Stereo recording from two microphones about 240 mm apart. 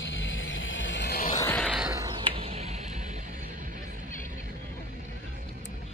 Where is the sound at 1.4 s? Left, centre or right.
Centre.